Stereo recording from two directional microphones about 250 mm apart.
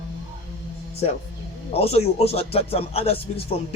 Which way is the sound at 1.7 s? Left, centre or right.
Left.